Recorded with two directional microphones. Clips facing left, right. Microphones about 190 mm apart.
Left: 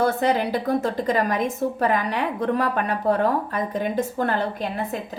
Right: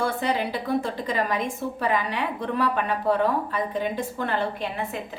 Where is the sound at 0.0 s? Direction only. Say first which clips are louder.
Left 4 dB; 45° left (ahead or behind).